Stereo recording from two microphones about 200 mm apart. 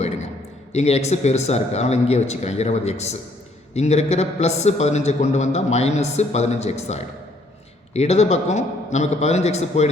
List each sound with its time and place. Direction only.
0.7 s a man's voice: 35° left (ahead or behind)